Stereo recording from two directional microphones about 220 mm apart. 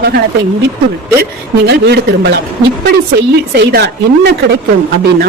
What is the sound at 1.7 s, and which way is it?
Speech, 50° right (ahead or behind).